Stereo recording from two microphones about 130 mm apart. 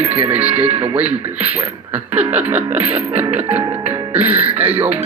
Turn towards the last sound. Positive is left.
turn(degrees=-15)  # may be behind; listen again after turning